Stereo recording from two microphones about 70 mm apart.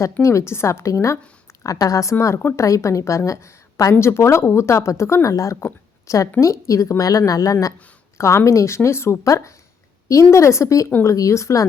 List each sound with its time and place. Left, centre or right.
0.2 s a woman's voice: left
3.9 s a woman's voice: left
8.2 s a woman's voice: left